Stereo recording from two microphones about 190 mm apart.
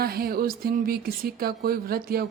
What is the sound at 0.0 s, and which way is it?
Speech, 55° right (ahead or behind).